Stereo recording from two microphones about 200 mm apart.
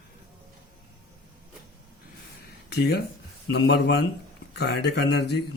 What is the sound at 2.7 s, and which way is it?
Speech, 55° left (ahead or behind).